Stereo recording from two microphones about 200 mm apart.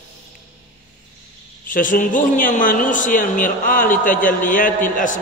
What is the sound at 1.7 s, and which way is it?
A man's voice, 40° left (ahead or behind).